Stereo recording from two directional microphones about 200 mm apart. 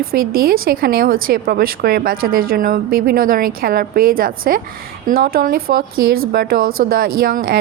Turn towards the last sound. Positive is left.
turn(degrees=-50)  # may be behind; listen again after turning